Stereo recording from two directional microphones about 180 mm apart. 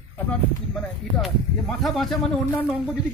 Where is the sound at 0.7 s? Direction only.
Centre (ahead or behind).